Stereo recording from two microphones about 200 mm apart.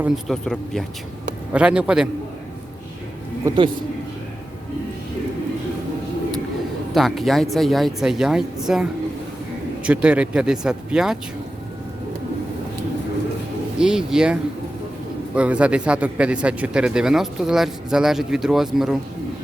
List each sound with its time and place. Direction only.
0.0 s speech: centre (ahead or behind)
3.4 s speech: 20° right (ahead or behind)
6.9 s speech: centre (ahead or behind)
13.7 s speech: 5° right (ahead or behind)
15.4 s speech: 5° right (ahead or behind)